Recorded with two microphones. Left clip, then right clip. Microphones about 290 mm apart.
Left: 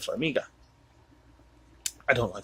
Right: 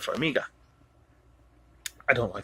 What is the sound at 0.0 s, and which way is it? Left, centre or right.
Speech, centre.